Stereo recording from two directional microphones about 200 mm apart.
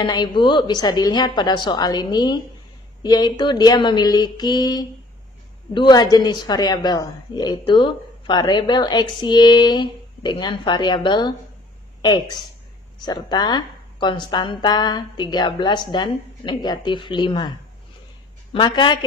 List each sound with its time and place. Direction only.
0.0 s a woman's voice: 20° left (ahead or behind)
13.0 s a woman's voice: 20° left (ahead or behind)